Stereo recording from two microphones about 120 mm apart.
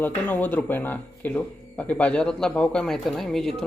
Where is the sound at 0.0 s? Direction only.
15° left (ahead or behind).